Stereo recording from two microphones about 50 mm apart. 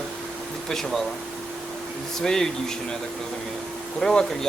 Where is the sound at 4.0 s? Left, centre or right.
Centre.